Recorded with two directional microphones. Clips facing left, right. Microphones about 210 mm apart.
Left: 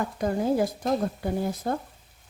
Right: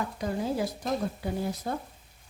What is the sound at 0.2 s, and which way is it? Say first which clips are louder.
A woman's voice: left 6 dB; 50° left (ahead or behind).